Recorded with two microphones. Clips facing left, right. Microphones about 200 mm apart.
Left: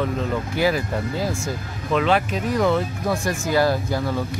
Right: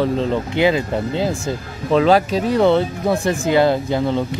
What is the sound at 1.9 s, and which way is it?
Speech, 35° right (ahead or behind).